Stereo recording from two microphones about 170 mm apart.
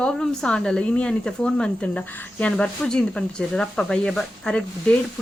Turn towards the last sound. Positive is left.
turn(degrees=5)  # may be behind; listen again after turning